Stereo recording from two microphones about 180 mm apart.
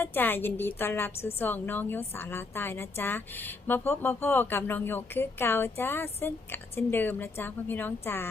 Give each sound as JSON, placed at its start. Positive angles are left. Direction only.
{"t": 0.0, "sound": "speech", "side_deg": 10}